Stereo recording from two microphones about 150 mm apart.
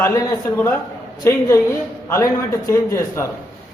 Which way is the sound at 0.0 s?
20° left (ahead or behind).